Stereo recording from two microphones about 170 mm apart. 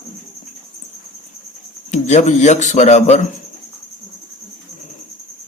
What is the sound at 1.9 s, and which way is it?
Speech, 45° left (ahead or behind).